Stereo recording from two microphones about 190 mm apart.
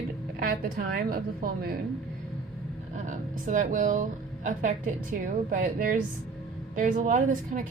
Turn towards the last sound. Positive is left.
turn(degrees=-45)  # may be behind; listen again after turning